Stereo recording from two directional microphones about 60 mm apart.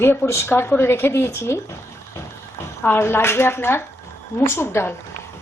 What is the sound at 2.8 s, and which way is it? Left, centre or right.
Speech, left.